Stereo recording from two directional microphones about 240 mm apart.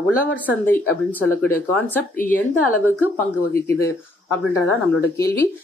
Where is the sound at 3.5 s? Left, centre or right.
Centre.